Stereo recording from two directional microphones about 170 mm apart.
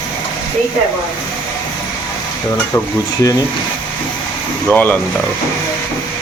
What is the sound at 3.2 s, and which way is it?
Speech, 20° left (ahead or behind).